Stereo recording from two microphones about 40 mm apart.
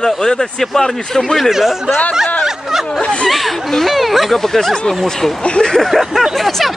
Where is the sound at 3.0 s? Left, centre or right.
Left.